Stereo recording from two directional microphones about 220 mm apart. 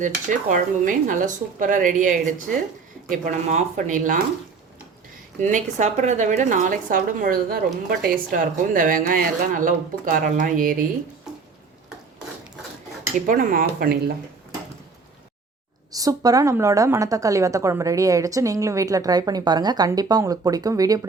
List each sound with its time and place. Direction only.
0.0 s speech: 35° right (ahead or behind)
5.4 s speech: 35° right (ahead or behind)
13.2 s speech: 35° right (ahead or behind)
15.9 s a woman's voice: 15° right (ahead or behind)